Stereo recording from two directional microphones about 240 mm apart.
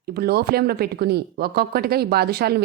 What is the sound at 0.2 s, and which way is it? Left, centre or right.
Speech, right.